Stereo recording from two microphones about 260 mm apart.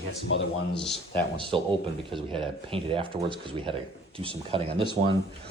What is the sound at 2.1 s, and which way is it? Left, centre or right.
Speech, centre.